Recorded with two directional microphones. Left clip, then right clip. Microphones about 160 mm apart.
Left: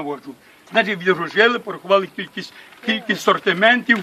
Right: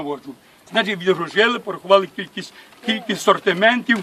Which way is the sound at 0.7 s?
15° right (ahead or behind).